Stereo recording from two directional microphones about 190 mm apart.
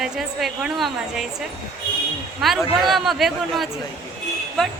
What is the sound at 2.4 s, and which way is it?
Speech, centre (ahead or behind).